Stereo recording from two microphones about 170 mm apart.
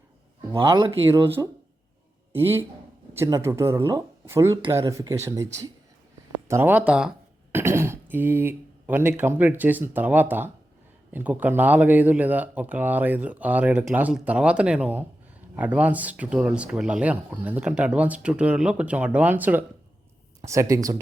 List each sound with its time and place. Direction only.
0.5 s speech: 25° right (ahead or behind)
6.5 s speech: 10° right (ahead or behind)